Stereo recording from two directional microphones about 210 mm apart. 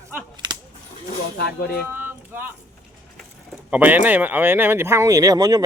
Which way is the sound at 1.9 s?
10° right (ahead or behind).